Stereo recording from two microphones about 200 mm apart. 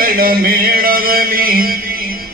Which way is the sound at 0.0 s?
45° right (ahead or behind).